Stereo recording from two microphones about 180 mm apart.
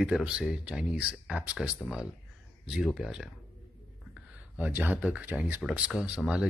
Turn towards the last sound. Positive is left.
turn(degrees=-5)  # may be behind; listen again after turning